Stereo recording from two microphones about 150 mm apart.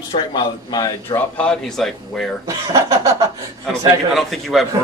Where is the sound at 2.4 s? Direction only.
25° right (ahead or behind).